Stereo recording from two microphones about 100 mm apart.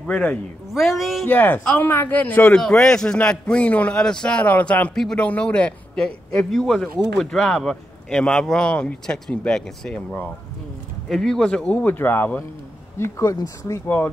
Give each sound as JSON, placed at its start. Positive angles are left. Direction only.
{"t": 0.0, "sound": "speech", "side_deg": 10}
{"t": 0.7, "sound": "speech", "side_deg": 0}
{"t": 1.2, "sound": "speech", "side_deg": 20}
{"t": 2.5, "sound": "speech", "side_deg": 5}
{"t": 11.1, "sound": "speech", "side_deg": 5}